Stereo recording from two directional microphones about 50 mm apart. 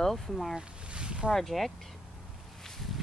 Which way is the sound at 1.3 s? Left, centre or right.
Centre.